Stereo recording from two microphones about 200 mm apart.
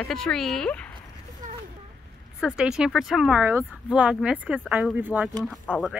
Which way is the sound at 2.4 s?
5° right (ahead or behind).